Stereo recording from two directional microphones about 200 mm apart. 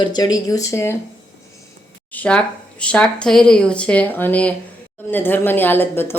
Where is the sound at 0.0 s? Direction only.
20° left (ahead or behind).